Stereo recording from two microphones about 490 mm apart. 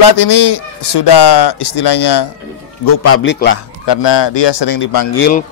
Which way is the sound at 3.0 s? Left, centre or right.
Left.